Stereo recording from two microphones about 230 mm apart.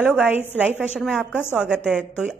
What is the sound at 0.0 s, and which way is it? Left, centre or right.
A woman's voice, centre.